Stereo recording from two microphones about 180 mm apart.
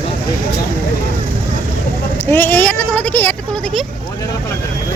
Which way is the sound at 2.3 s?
10° left (ahead or behind).